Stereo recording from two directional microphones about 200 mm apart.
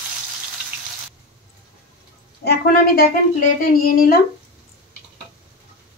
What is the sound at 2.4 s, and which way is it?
A woman's voice, 50° left (ahead or behind).